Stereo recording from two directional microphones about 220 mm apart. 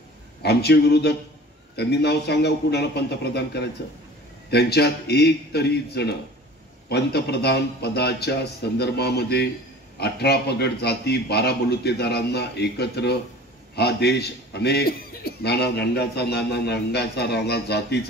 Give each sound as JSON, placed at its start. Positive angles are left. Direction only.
{"t": 0.4, "sound": "a man's voice", "side_deg": 50}